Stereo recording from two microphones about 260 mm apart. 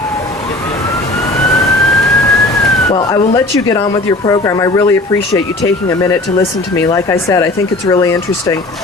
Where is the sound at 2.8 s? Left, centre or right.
Centre.